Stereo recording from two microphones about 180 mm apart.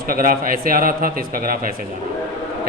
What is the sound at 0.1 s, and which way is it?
A man's voice, 50° right (ahead or behind).